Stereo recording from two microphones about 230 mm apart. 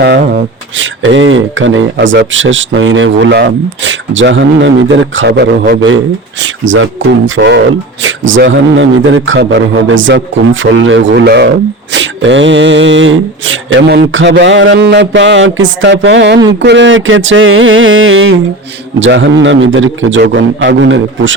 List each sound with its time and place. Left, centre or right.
0.8 s a man's voice: right